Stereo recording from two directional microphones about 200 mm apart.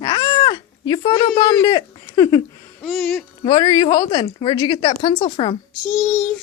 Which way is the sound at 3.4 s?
20° left (ahead or behind).